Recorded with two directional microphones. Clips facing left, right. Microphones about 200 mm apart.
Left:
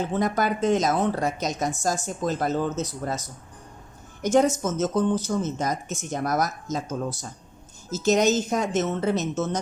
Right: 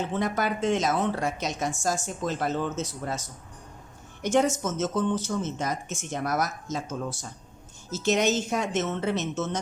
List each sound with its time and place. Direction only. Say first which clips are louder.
0.1 s a woman's voice: left 3 dB; 40° left (ahead or behind)